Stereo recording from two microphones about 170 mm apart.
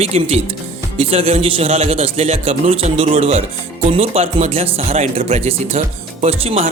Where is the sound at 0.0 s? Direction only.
40° right (ahead or behind).